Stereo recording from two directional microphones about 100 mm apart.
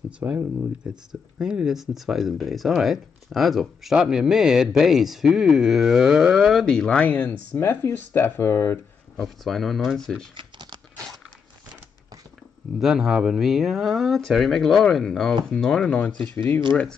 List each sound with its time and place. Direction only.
0.2 s speech: 20° right (ahead or behind); by 8.7 s 25° left (ahead or behind)
9.1 s speech: centre (ahead or behind)
10.3 s computer keyboard: 45° right (ahead or behind)
12.7 s speech: 5° right (ahead or behind)